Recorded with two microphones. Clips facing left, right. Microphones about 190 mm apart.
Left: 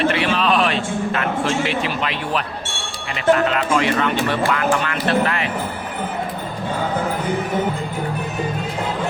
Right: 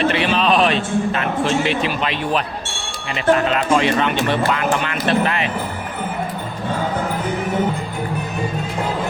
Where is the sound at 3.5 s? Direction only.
25° right (ahead or behind).